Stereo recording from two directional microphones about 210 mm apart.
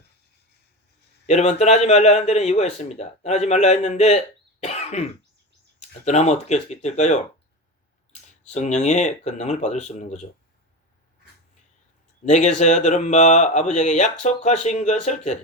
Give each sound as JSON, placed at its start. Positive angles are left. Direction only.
{"t": 1.3, "sound": "speech", "side_deg": 30}
{"t": 4.6, "sound": "cough", "side_deg": 30}
{"t": 6.1, "sound": "speech", "side_deg": 35}
{"t": 8.4, "sound": "speech", "side_deg": 35}
{"t": 12.2, "sound": "speech", "side_deg": 35}